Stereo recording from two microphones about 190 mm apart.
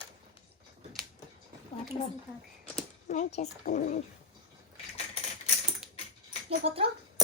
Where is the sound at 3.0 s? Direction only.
40° left (ahead or behind).